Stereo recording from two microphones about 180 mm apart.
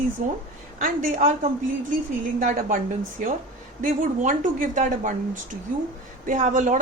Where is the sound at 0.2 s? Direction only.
50° right (ahead or behind).